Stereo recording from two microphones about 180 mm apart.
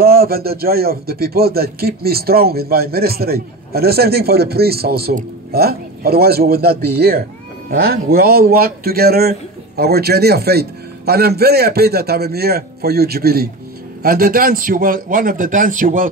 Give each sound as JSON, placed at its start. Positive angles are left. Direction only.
{"t": 0.0, "sound": "a man's voice", "side_deg": -55}